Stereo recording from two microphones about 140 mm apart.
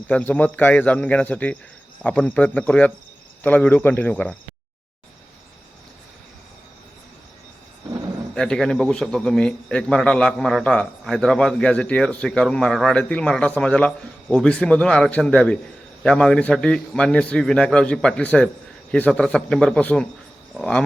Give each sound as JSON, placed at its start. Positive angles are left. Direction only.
{"t": 0.1, "sound": "speech", "side_deg": 10}
{"t": 8.4, "sound": "a man's voice", "side_deg": 5}